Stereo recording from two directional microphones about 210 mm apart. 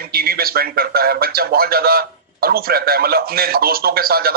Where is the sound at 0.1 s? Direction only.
45° right (ahead or behind).